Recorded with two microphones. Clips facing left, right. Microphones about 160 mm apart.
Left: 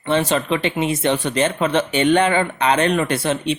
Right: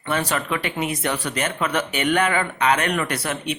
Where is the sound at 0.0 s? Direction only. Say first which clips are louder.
Left 5 dB; 25° left (ahead or behind).